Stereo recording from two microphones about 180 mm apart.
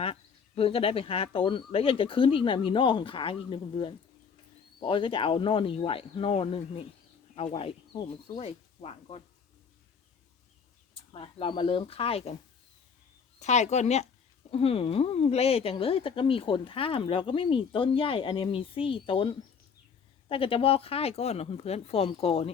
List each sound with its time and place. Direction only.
0.0 s speech: 30° left (ahead or behind)
11.1 s speech: 30° left (ahead or behind)
13.4 s speech: 40° left (ahead or behind)